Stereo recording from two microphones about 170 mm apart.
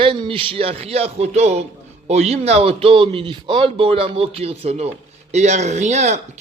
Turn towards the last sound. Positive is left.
turn(degrees=-40)  # may be behind; listen again after turning